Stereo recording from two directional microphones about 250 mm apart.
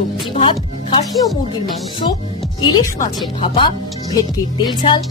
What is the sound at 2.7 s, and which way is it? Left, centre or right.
Speech, centre.